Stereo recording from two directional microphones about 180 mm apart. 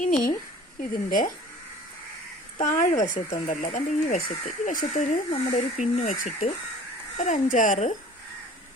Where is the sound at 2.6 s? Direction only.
45° left (ahead or behind).